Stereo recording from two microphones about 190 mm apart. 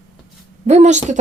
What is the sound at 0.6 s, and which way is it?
Speech, 35° right (ahead or behind).